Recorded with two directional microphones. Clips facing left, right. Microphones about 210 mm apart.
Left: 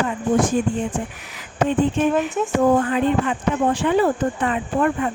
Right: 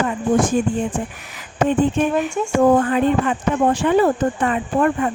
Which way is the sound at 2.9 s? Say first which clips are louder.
Right 2 dB; 45° right (ahead or behind).